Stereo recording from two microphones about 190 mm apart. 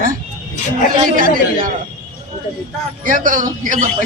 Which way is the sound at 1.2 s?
45° right (ahead or behind).